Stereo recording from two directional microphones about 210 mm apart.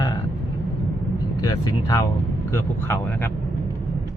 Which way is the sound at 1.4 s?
15° left (ahead or behind).